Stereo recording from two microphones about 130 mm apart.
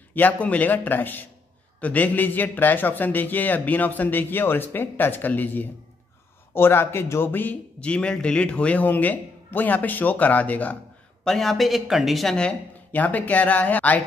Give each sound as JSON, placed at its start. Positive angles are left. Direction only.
{"t": 0.1, "sound": "a man's voice", "side_deg": 10}